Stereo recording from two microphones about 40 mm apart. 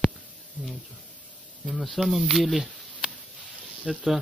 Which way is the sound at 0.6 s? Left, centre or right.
Right.